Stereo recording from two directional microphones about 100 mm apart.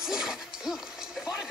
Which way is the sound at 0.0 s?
5° right (ahead or behind).